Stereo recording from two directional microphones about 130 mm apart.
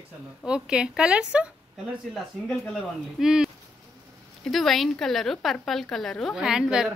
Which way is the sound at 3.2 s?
5° right (ahead or behind).